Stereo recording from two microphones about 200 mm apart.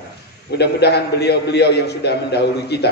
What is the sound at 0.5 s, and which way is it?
A man's voice, 55° left (ahead or behind).